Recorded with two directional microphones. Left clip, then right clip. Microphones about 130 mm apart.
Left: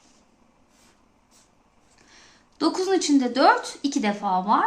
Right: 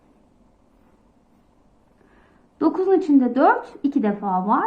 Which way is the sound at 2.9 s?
10° right (ahead or behind).